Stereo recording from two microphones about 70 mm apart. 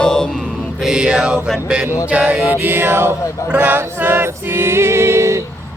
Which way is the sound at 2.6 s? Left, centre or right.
Right.